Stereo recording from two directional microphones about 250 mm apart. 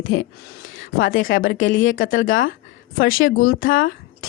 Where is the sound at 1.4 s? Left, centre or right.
Left.